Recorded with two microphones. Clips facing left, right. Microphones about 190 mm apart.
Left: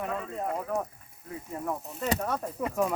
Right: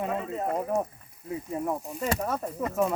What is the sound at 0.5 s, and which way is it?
Speech, 25° right (ahead or behind).